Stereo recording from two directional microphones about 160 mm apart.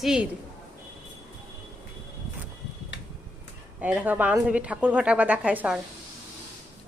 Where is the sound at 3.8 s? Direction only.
10° right (ahead or behind).